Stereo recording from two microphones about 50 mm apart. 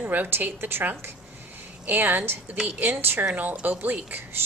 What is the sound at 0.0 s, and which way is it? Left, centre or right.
A woman's voice, right.